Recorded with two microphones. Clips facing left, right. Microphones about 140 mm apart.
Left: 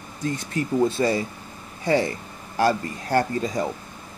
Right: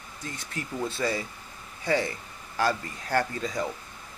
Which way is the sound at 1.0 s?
40° left (ahead or behind).